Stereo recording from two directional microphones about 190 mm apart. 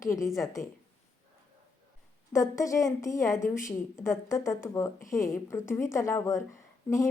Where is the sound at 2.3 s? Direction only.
15° left (ahead or behind).